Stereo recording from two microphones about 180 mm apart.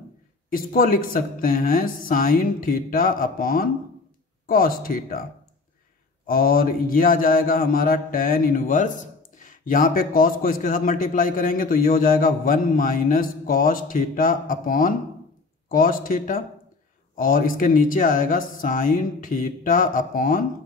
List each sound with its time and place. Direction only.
0.5 s a man's voice: 50° left (ahead or behind)
6.2 s a man's voice: 55° left (ahead or behind)